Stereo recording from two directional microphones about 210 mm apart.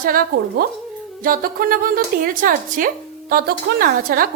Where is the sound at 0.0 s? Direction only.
45° right (ahead or behind).